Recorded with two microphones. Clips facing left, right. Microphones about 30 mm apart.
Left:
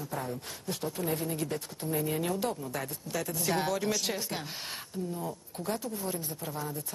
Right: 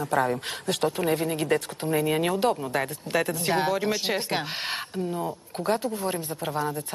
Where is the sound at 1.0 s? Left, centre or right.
Right.